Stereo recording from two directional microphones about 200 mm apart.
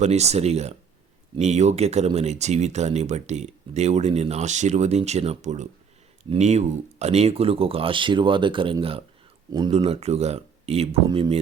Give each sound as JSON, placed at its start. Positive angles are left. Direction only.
{"t": 0.0, "sound": "speech", "side_deg": -35}